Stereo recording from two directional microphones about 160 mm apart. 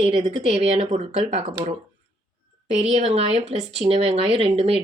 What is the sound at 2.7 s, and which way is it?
Speech, 40° right (ahead or behind).